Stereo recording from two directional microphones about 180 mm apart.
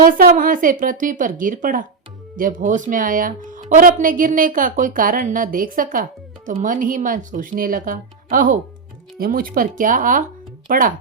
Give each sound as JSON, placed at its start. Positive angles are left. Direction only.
{"t": 0.0, "sound": "speech", "side_deg": -55}